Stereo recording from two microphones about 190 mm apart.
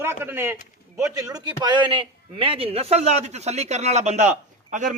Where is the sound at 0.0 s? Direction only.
10° right (ahead or behind).